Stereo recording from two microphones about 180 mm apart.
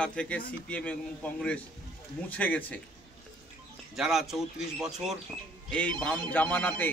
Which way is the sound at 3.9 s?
Centre (ahead or behind).